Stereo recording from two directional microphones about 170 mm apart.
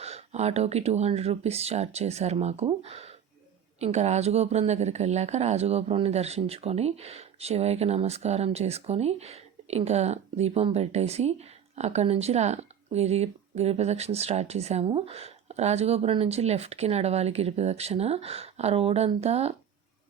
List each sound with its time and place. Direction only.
0.0 s speech: 40° right (ahead or behind)